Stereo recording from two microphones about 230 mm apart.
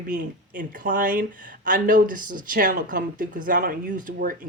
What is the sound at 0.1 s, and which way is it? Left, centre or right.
Speech, right.